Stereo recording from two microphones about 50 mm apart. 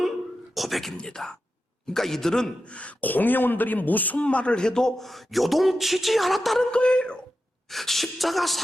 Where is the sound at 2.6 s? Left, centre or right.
Left.